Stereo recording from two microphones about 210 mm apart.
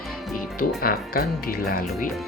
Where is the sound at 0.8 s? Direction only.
45° left (ahead or behind).